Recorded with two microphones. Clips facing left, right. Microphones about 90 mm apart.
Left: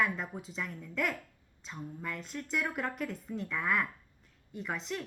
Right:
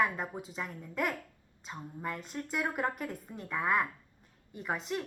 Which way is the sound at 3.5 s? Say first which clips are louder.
Right 3 dB; 40° right (ahead or behind).